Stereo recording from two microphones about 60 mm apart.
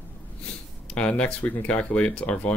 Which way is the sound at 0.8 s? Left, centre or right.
Centre.